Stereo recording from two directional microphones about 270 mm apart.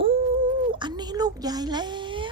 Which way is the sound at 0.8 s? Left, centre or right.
Centre.